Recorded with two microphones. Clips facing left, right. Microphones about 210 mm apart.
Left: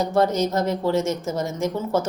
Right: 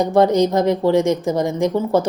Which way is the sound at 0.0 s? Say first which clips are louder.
Right 6 dB; 15° right (ahead or behind).